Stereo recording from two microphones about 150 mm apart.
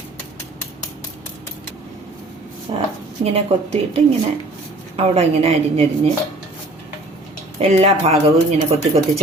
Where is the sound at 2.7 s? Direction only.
35° right (ahead or behind).